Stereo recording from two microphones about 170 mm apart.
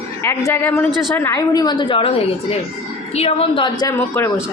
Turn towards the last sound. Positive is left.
turn(degrees=15)  # may be behind; listen again after turning